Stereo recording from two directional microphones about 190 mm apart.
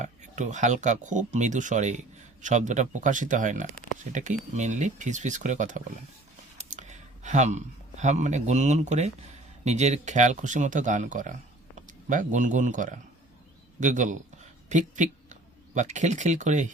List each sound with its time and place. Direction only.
0.0 s speech: 40° right (ahead or behind)